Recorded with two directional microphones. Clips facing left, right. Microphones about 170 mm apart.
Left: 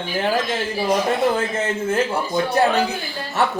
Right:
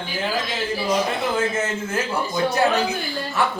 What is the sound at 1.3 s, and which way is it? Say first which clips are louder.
Speech: left 1 dB; 30° left (ahead or behind).